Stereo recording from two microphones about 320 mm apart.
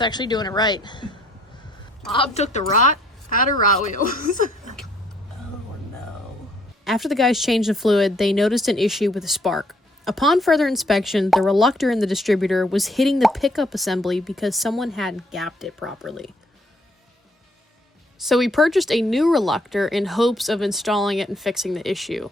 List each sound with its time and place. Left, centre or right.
0.0 s speech: centre
2.1 s a woman's voice: centre
6.8 s speech: centre
18.3 s speech: centre